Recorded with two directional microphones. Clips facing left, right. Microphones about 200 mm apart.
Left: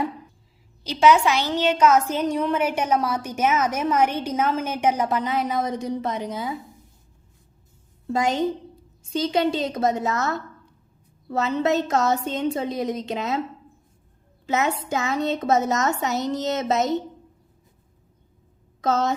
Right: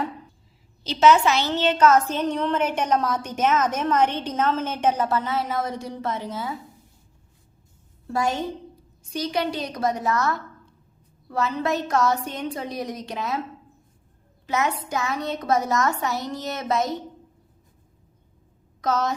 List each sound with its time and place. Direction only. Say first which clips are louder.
0.9 s a woman's voice: even; 10° left (ahead or behind)
8.0 s a woman's voice: left 3 dB; 20° left (ahead or behind)
14.4 s a woman's voice: left 2 dB; 25° left (ahead or behind)
18.8 s a woman's voice: left 2 dB; 25° left (ahead or behind)